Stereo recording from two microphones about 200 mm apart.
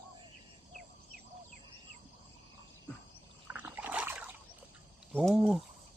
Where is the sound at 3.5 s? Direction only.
10° right (ahead or behind).